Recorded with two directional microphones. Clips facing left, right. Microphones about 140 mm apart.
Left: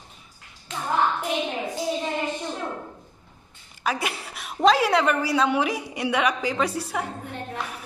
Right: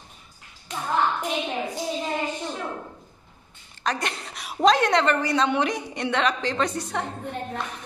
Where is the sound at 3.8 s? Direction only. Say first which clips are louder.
Left 1 dB; 5° left (ahead or behind).